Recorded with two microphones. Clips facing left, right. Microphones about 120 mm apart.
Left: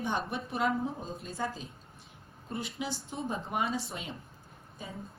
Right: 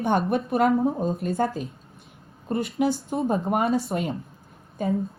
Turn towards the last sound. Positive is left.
turn(degrees=-60)  # may be behind; listen again after turning